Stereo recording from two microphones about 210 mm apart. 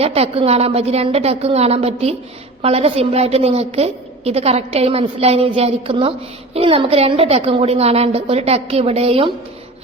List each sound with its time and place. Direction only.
0.0 s a woman's voice: 30° right (ahead or behind)